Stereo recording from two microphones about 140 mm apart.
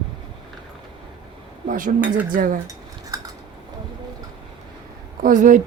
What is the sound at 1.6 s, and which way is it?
Speech, 70° right (ahead or behind).